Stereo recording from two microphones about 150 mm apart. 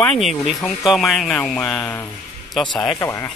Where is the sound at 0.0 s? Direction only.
Centre (ahead or behind).